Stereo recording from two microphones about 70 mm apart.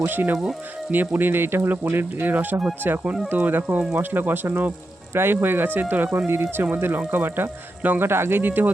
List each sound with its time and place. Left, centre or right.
0.0 s speech: right